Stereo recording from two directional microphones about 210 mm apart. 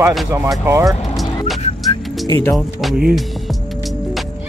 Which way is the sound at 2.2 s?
15° left (ahead or behind).